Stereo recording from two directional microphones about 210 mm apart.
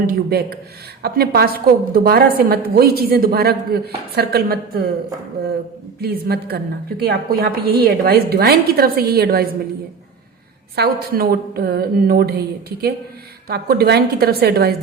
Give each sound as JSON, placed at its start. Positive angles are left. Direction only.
{"t": 0.0, "sound": "a woman's voice", "side_deg": -45}
{"t": 6.0, "sound": "a woman's voice", "side_deg": -50}
{"t": 10.8, "sound": "a woman's voice", "side_deg": -45}